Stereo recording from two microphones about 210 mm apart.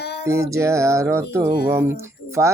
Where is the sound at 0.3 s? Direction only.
15° right (ahead or behind).